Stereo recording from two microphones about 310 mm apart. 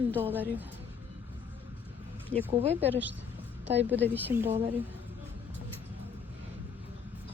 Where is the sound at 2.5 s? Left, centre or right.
Centre.